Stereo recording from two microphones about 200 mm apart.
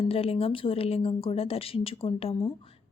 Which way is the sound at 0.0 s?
30° left (ahead or behind).